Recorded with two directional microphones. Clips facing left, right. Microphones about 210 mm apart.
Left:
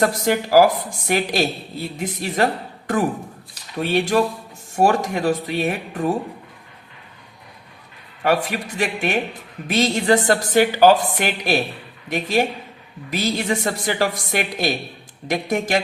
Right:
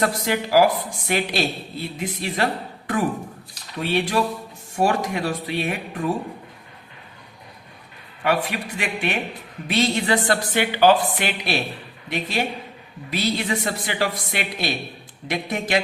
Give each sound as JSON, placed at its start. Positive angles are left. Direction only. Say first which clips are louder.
{"t": 0.0, "sound": "speech", "louder": "left 3 dB", "side_deg": 45}
{"t": 8.2, "sound": "speech", "louder": "left 2 dB", "side_deg": 45}